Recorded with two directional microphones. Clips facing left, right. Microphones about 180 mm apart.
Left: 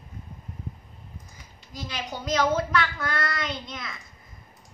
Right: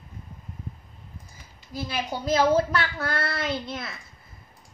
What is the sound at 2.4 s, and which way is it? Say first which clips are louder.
Speech: right 2 dB; 30° right (ahead or behind).